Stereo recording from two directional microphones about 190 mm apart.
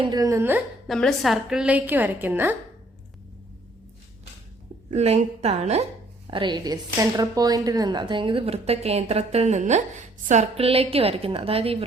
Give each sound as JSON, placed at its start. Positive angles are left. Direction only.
{"t": 0.0, "sound": "a woman's voice", "side_deg": -20}
{"t": 0.9, "sound": "a woman's voice", "side_deg": 0}
{"t": 4.9, "sound": "a woman's voice", "side_deg": -35}